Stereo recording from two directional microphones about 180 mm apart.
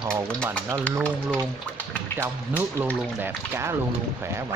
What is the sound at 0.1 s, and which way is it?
Speech, 5° left (ahead or behind).